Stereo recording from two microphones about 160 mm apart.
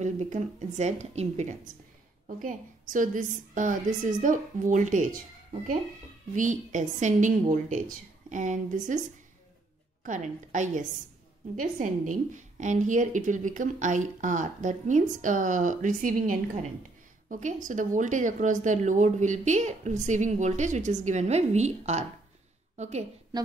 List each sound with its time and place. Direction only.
0.0 s a woman's voice: 45° right (ahead or behind)
2.2 s a woman's voice: 55° right (ahead or behind)
10.0 s a woman's voice: 50° right (ahead or behind)
23.3 s a woman's voice: 25° right (ahead or behind)